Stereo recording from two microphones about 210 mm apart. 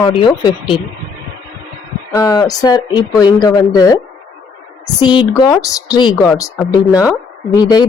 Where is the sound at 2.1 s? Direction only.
15° left (ahead or behind).